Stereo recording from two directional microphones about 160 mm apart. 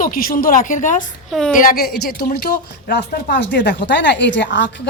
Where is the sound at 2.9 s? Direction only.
90° left.